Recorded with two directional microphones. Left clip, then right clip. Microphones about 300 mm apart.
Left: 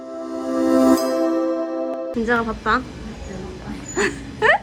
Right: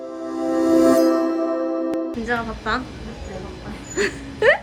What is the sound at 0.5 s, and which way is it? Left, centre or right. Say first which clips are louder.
Music: even; centre.